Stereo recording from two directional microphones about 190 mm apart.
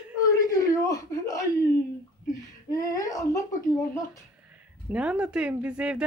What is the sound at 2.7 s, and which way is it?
Speech, 20° left (ahead or behind).